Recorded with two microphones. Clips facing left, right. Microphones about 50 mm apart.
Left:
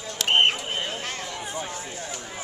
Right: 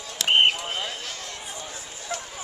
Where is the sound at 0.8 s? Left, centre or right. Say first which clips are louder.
Left 2 dB; left.